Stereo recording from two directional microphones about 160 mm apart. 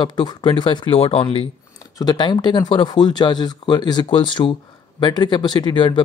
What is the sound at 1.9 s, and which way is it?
Speech, 25° left (ahead or behind).